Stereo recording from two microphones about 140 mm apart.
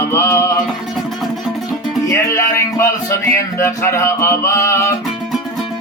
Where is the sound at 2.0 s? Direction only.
20° left (ahead or behind).